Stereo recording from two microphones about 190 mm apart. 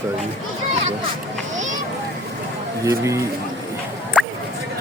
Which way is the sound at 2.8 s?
15° right (ahead or behind).